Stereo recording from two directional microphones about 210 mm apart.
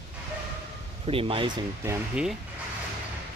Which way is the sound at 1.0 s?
25° right (ahead or behind).